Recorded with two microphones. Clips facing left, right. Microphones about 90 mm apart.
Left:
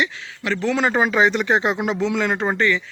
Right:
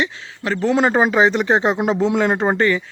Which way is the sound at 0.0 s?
35° right (ahead or behind).